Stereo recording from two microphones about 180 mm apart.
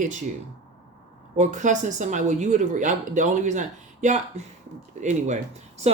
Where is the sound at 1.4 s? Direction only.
40° right (ahead or behind).